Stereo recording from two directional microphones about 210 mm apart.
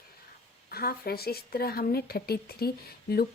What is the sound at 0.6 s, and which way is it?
Speech, 45° left (ahead or behind).